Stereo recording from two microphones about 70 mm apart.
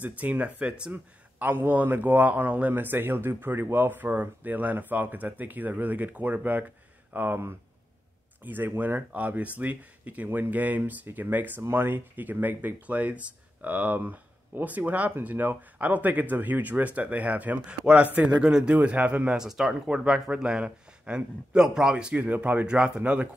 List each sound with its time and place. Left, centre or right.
0.0 s speech: right
1.4 s speech: right
19.3 s speech: centre